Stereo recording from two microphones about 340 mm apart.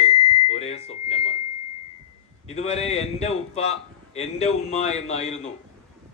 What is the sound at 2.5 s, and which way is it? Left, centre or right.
A man's voice, centre.